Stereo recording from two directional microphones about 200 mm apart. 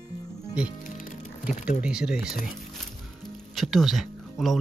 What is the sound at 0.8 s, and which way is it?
Music, 45° left (ahead or behind).